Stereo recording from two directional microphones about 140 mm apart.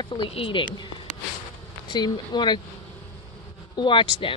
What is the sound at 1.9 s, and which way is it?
Speech, 30° left (ahead or behind).